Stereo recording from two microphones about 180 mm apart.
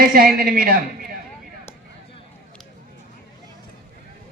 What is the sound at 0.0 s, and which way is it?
Speech, 55° right (ahead or behind).